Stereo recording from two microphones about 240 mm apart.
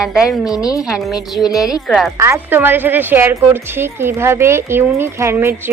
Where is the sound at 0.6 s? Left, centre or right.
Centre.